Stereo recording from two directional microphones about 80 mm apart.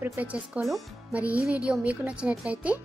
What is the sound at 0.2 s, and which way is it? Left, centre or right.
A child's voice, right.